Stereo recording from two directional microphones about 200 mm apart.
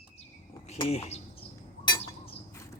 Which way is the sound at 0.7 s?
30° left (ahead or behind).